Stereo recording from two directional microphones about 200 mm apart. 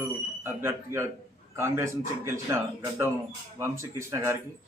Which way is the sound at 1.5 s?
10° right (ahead or behind).